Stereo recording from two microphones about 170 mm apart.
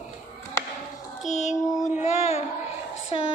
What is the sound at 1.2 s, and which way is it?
Music, 45° left (ahead or behind).